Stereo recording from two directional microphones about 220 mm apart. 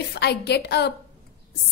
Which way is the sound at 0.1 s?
50° left (ahead or behind).